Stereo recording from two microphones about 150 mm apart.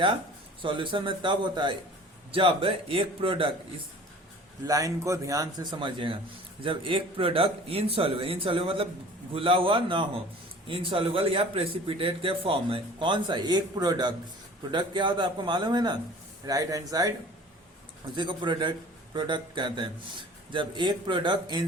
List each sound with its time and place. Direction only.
0.6 s speech: 35° right (ahead or behind)
4.6 s speech: 20° right (ahead or behind)
18.1 s speech: 30° right (ahead or behind)